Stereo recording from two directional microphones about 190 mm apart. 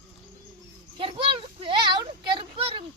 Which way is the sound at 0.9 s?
30° right (ahead or behind).